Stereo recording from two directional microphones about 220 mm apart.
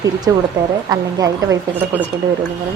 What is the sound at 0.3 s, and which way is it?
A woman's voice, 15° right (ahead or behind).